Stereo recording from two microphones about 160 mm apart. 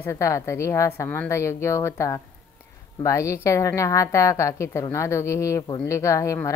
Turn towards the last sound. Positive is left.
turn(degrees=20)  # may be behind; listen again after turning